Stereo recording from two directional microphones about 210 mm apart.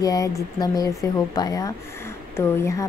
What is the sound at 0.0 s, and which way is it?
Speech, 15° left (ahead or behind).